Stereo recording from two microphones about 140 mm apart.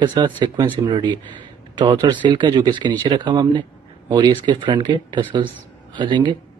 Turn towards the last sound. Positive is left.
turn(degrees=-35)  # may be behind; listen again after turning